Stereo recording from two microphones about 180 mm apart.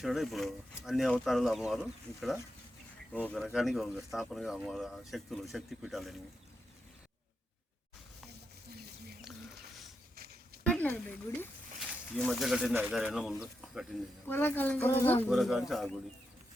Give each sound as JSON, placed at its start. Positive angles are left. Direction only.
{"t": 0.0, "sound": "speech", "side_deg": 0}
{"t": 10.2, "sound": "a sound", "side_deg": -60}
{"t": 10.6, "sound": "a sound", "side_deg": 5}
{"t": 12.1, "sound": "speech", "side_deg": 0}
{"t": 14.3, "sound": "speech", "side_deg": 10}
{"t": 15.3, "sound": "speech", "side_deg": 0}